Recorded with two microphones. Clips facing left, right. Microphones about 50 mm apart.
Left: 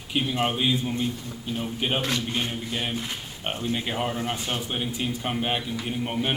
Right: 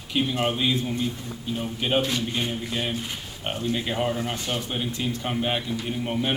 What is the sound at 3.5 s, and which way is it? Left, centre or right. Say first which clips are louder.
Mantra: right 2 dB; left.